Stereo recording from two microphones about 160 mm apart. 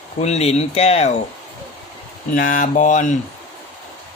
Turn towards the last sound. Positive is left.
turn(degrees=50)  # may be behind; listen again after turning